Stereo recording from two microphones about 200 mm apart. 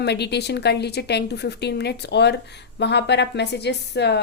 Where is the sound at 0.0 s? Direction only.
55° left (ahead or behind).